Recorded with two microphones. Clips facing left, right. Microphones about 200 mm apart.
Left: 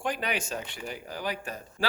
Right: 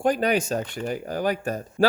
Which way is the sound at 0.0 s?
40° right (ahead or behind).